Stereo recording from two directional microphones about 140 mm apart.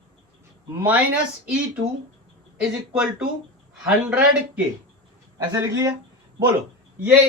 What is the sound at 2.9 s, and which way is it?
A man's voice, 5° right (ahead or behind).